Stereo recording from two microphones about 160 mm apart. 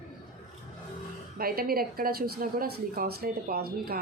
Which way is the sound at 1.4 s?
70° right (ahead or behind).